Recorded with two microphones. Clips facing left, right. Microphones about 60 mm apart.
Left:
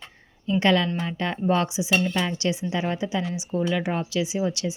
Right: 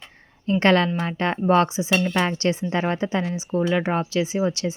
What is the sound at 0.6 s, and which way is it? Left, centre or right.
A woman's voice, right.